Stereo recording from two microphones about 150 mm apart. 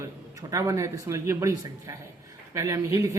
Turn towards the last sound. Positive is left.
turn(degrees=-20)  # may be behind; listen again after turning